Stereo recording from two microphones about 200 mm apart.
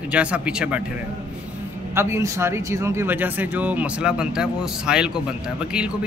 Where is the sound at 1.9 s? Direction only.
15° right (ahead or behind).